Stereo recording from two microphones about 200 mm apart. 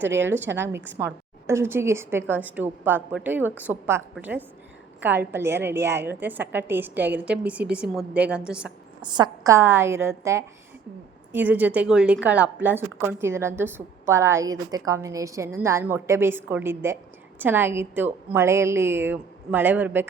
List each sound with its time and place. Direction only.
0.0 s a woman's voice: 10° right (ahead or behind)
9.0 s a woman's voice: 20° right (ahead or behind)